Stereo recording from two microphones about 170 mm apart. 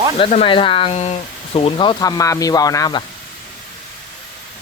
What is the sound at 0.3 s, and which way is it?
Speech, 35° left (ahead or behind).